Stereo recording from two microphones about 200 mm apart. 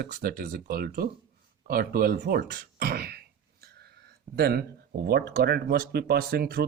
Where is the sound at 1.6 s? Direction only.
45° right (ahead or behind).